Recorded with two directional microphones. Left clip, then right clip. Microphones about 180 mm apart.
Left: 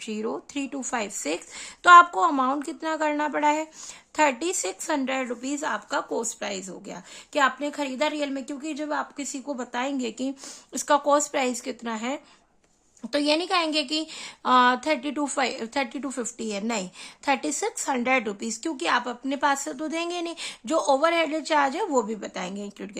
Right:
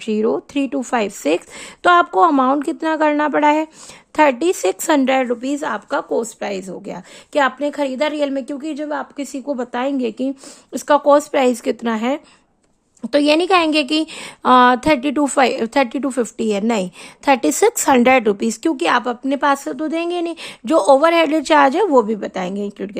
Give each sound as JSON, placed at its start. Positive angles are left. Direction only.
{"t": 0.0, "sound": "a woman's voice", "side_deg": -40}